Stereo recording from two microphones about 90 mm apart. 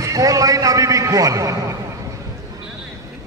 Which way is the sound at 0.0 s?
40° right (ahead or behind).